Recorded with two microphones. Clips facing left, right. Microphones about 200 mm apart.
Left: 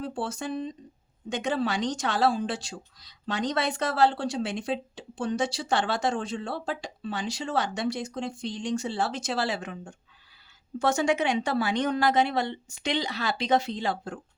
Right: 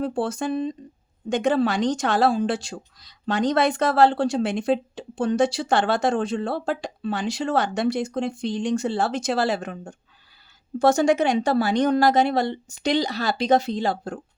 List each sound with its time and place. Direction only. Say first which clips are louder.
0.0 s a woman's voice: right 7 dB; 50° right (ahead or behind)